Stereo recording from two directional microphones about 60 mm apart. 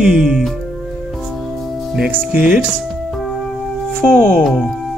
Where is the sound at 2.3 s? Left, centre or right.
Centre.